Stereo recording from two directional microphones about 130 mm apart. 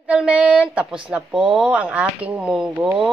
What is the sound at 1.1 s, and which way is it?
Speech, 5° right (ahead or behind).